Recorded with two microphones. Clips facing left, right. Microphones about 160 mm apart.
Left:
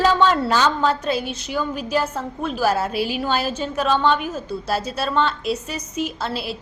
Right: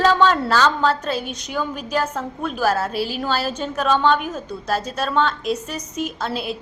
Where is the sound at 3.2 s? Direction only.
10° left (ahead or behind).